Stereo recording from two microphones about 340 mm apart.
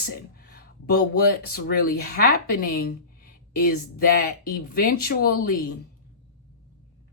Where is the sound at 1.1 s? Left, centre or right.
Left.